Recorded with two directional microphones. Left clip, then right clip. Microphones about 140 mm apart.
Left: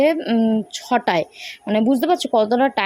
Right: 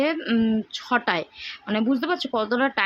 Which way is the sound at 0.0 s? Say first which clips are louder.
Left 6 dB; 25° left (ahead or behind).